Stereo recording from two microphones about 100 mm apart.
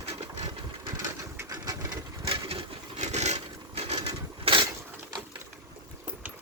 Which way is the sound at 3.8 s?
90° right.